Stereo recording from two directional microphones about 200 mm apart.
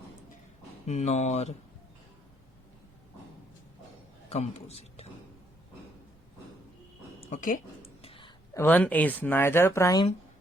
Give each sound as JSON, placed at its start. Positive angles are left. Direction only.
{"t": 0.9, "sound": "speech", "side_deg": 35}
{"t": 4.3, "sound": "a man's voice", "side_deg": 30}
{"t": 7.3, "sound": "speech", "side_deg": 40}
{"t": 8.0, "sound": "a sound", "side_deg": 25}
{"t": 8.5, "sound": "speech", "side_deg": 10}